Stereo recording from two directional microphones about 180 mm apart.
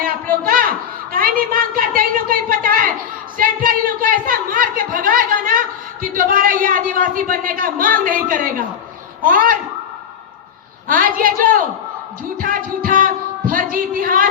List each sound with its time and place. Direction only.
0.0 s a sound: 50° right (ahead or behind)
9.2 s a woman's voice: 50° right (ahead or behind)
10.8 s a woman's voice: 50° right (ahead or behind)